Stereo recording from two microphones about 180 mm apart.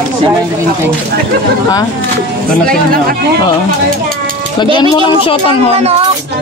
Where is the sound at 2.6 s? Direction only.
55° right (ahead or behind).